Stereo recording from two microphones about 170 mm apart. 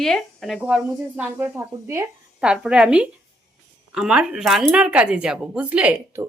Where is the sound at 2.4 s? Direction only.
5° right (ahead or behind).